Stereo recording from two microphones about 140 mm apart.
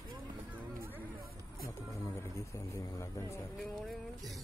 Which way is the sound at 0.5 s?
15° right (ahead or behind).